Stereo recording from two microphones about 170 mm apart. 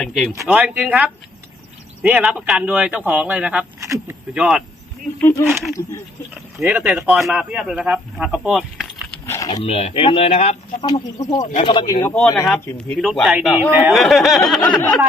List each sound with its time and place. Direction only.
0.0 s speech: centre (ahead or behind)
3.8 s speech: 15° right (ahead or behind)
4.4 s speech: 5° right (ahead or behind)
6.6 s speech: 10° right (ahead or behind)
9.2 s a sound: 15° left (ahead or behind)
9.6 s speech: 35° left (ahead or behind)
10.8 s speech: 25° left (ahead or behind)
12.0 s speech: 5° left (ahead or behind)
13.0 s speech: centre (ahead or behind)